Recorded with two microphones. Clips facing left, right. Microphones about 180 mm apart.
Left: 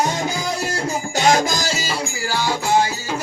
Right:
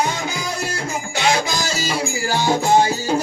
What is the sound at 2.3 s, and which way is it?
Music, 20° right (ahead or behind).